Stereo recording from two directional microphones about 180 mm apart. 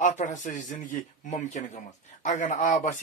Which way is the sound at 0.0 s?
45° left (ahead or behind).